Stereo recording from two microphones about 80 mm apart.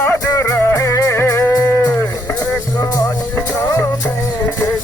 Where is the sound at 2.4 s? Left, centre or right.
Left.